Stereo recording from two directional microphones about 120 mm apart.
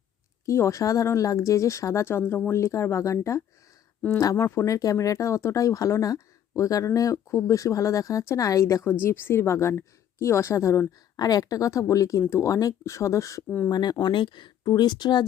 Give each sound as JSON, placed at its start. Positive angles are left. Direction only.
{"t": 0.4, "sound": "speech", "side_deg": 25}